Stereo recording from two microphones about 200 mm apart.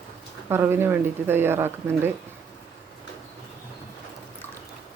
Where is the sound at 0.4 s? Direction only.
10° right (ahead or behind).